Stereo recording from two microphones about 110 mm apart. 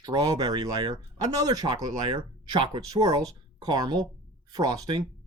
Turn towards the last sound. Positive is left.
turn(degrees=-35)  # may be behind; listen again after turning